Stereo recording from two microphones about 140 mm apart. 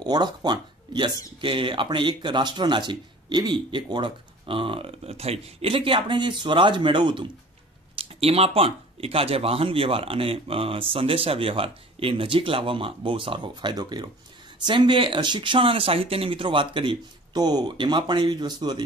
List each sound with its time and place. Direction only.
0.0 s speech: 30° right (ahead or behind)